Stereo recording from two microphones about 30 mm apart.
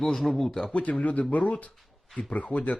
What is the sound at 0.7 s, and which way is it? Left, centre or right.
Speech, left.